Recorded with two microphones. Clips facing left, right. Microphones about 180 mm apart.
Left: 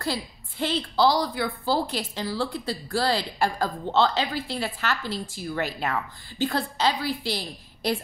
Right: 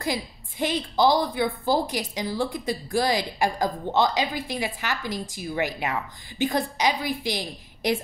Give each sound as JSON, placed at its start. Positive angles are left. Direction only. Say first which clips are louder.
{"t": 0.0, "sound": "a woman's voice", "louder": "right 1 dB", "side_deg": -15}